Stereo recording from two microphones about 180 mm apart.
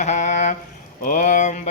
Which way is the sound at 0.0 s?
40° left (ahead or behind).